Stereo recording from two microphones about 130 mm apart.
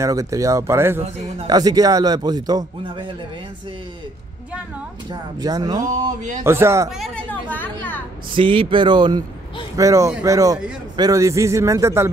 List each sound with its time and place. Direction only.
0.0 s speech: 25° right (ahead or behind)
5.1 s speech: 30° right (ahead or behind)
6.0 s speech: 75° right (ahead or behind)
6.4 s speech: 20° right (ahead or behind)
7.2 s chatter: 15° left (ahead or behind)
8.4 s speech: 40° right (ahead or behind)
9.8 s speech: 25° right (ahead or behind)